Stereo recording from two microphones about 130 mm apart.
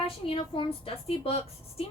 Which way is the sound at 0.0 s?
45° left (ahead or behind).